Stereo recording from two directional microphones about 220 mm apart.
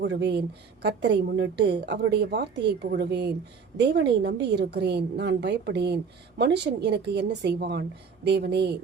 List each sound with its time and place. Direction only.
0.0 s a woman's voice: 50° right (ahead or behind)